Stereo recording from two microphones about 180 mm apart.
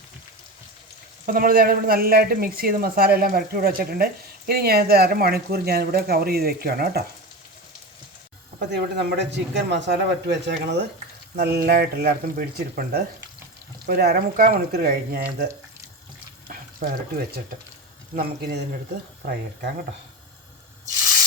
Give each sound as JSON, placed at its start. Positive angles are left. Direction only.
{"t": 1.2, "sound": "speech", "side_deg": -50}
{"t": 8.5, "sound": "a man's voice", "side_deg": -65}
{"t": 16.5, "sound": "speech", "side_deg": -50}